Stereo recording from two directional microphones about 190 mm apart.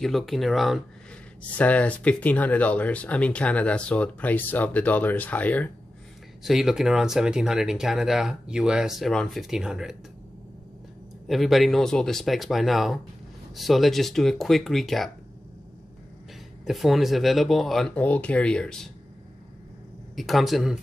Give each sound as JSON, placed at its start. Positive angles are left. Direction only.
{"t": 0.0, "sound": "speech", "side_deg": 0}
{"t": 11.2, "sound": "speech", "side_deg": 0}
{"t": 16.6, "sound": "speech", "side_deg": 0}
{"t": 20.2, "sound": "speech", "side_deg": 0}